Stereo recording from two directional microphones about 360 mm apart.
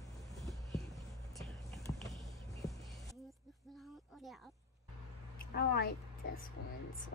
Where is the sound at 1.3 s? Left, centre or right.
Centre.